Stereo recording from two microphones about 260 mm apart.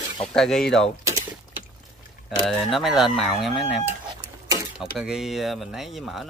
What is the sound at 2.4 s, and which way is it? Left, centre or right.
Speech, centre.